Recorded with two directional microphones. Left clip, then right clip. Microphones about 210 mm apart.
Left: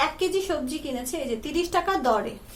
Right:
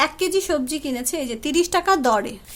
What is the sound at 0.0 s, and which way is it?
A woman's voice, 50° right (ahead or behind).